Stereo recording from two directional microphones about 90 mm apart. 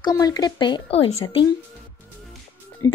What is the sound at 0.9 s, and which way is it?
Speech, 75° left (ahead or behind).